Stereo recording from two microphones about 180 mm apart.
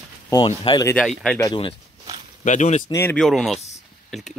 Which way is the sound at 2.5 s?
40° left (ahead or behind).